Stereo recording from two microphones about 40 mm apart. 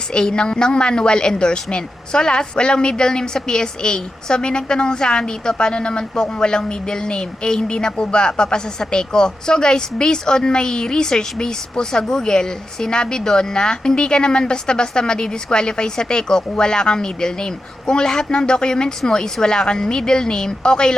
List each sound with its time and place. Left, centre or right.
0.1 s a woman's voice: left